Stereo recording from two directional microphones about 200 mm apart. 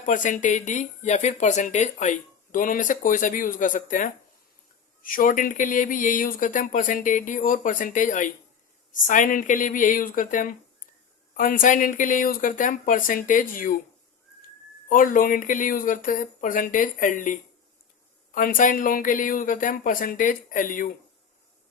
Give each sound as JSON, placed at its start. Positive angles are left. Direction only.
{"t": 0.0, "sound": "speech", "side_deg": 40}
{"t": 18.3, "sound": "speech", "side_deg": 45}